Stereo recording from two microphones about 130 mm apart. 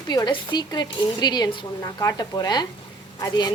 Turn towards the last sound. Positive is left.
turn(degrees=30)  # may be behind; listen again after turning